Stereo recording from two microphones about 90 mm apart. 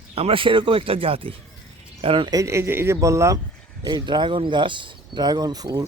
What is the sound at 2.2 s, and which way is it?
Speech, 45° right (ahead or behind).